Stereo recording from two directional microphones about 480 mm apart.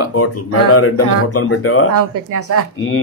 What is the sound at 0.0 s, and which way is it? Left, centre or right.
Speech, left.